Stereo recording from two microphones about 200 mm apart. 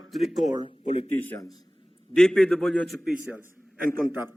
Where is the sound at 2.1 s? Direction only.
5° left (ahead or behind).